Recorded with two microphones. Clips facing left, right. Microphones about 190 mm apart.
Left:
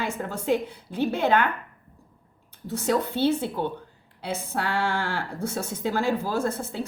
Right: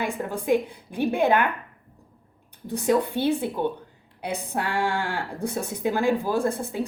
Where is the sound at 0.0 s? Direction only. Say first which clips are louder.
Right 2 dB; 15° right (ahead or behind).